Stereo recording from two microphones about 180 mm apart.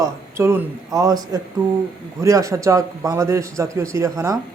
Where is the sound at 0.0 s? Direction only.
15° right (ahead or behind).